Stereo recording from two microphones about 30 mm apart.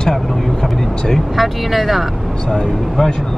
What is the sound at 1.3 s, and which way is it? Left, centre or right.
Speech, centre.